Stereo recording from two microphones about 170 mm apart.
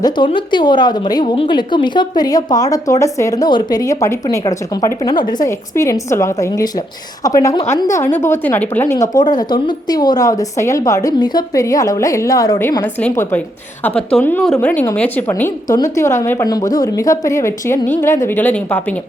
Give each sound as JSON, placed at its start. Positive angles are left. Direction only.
{"t": 0.0, "sound": "a woman's voice", "side_deg": 25}
{"t": 9.0, "sound": "a woman's voice", "side_deg": 25}